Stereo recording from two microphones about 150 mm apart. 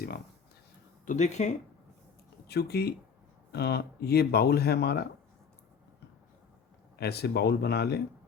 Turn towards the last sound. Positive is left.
turn(degrees=90)